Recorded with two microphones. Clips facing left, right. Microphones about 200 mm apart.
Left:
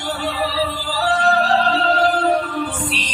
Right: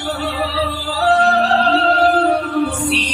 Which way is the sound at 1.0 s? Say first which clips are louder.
Right 4 dB; 65° right (ahead or behind).